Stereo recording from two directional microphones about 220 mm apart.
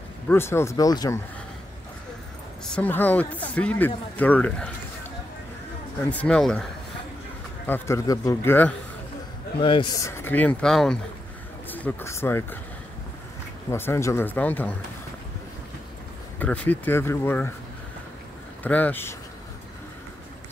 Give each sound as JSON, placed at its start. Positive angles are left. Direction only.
{"t": 0.3, "sound": "speech", "side_deg": 10}
{"t": 2.6, "sound": "speech", "side_deg": 5}
{"t": 5.9, "sound": "speech", "side_deg": 5}
{"t": 7.6, "sound": "speech", "side_deg": 10}
{"t": 9.6, "sound": "speech", "side_deg": 20}
{"t": 13.7, "sound": "speech", "side_deg": 10}
{"t": 16.3, "sound": "speech", "side_deg": 5}
{"t": 18.6, "sound": "speech", "side_deg": 5}